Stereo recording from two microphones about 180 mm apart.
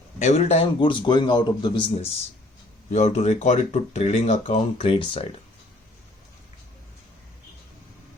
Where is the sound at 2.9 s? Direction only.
35° left (ahead or behind).